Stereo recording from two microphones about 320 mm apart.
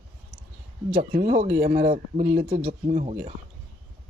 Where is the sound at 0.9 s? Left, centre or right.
Right.